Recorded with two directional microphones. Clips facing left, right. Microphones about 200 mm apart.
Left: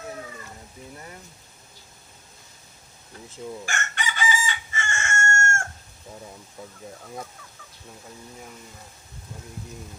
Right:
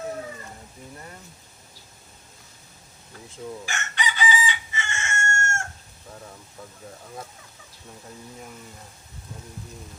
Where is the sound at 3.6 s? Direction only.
50° left (ahead or behind).